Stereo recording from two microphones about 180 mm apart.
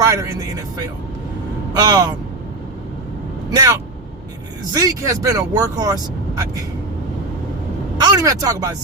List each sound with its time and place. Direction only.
0.0 s vehicle: 20° right (ahead or behind)
1.7 s speech: 20° right (ahead or behind)
3.5 s speech: 20° right (ahead or behind)
7.9 s speech: 20° right (ahead or behind)